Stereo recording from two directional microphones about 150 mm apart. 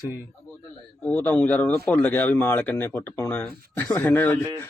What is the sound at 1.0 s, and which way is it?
A man's voice, 10° left (ahead or behind).